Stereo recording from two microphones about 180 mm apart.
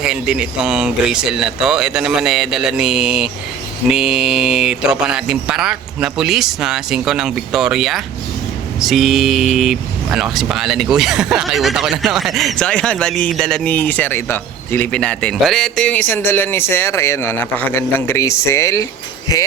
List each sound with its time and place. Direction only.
0.0 s speech: 5° right (ahead or behind); by 19.4 s 20° left (ahead or behind)